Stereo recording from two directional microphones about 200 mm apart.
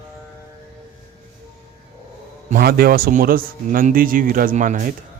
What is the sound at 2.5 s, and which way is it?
Speech, 50° right (ahead or behind).